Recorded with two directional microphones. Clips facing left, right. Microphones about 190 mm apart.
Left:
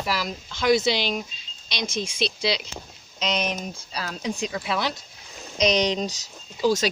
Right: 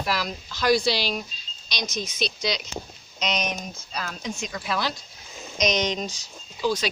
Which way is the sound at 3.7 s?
30° left (ahead or behind).